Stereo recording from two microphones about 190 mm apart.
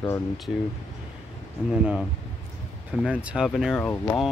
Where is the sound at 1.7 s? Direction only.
5° right (ahead or behind).